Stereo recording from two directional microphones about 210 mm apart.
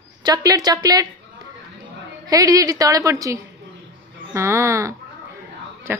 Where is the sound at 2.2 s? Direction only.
15° right (ahead or behind).